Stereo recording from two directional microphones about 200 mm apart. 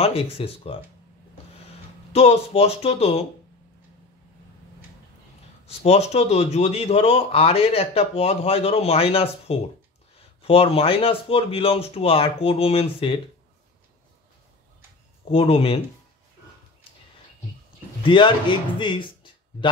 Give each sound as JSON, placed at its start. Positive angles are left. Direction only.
{"t": 0.0, "sound": "a man's voice", "side_deg": 30}
{"t": 2.1, "sound": "a man's voice", "side_deg": 30}
{"t": 5.7, "sound": "a man's voice", "side_deg": 30}
{"t": 15.3, "sound": "a man's voice", "side_deg": 30}
{"t": 18.0, "sound": "a man's voice", "side_deg": 25}